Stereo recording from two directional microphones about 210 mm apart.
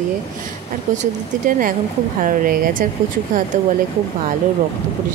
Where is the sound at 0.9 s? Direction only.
40° right (ahead or behind).